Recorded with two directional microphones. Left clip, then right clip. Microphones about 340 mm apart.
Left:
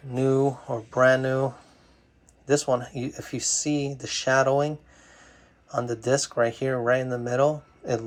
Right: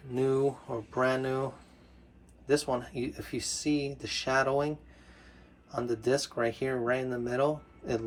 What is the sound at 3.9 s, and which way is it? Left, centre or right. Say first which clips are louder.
Speech: left 7 dB; centre.